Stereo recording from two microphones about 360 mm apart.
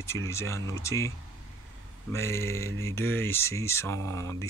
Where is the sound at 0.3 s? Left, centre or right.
Centre.